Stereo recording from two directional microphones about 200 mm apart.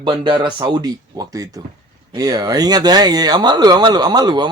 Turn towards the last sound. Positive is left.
turn(degrees=-20)  # may be behind; listen again after turning